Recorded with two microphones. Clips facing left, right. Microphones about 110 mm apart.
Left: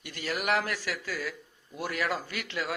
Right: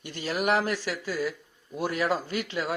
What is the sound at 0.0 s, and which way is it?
Speech, 25° right (ahead or behind).